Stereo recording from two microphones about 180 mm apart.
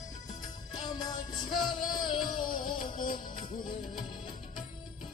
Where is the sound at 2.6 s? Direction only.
50° left (ahead or behind).